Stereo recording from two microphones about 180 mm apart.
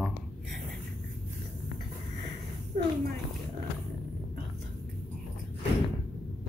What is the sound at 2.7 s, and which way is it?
Speech, 45° right (ahead or behind).